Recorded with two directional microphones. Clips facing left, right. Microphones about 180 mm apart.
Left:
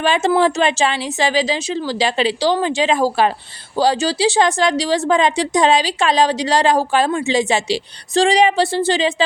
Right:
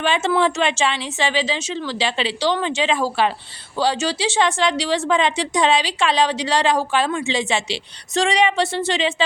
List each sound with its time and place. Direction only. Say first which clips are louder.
0.0 s a woman's voice: left 3 dB; 40° left (ahead or behind)